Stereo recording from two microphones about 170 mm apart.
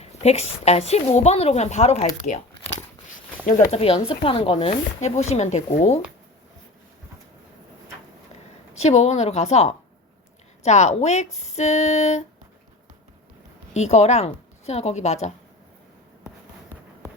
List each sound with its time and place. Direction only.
0.0 s speech: 40° left (ahead or behind)
2.2 s a sound: 40° left (ahead or behind)
3.7 s speech: 35° left (ahead or behind)
8.8 s speech: 40° left (ahead or behind)
13.7 s speech: 40° left (ahead or behind)